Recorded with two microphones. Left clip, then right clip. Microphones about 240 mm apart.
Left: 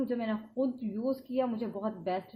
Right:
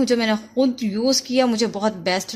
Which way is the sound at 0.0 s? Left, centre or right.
Right.